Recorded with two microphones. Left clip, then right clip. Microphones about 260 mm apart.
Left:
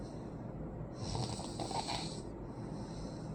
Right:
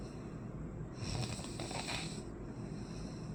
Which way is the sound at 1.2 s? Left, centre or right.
Right.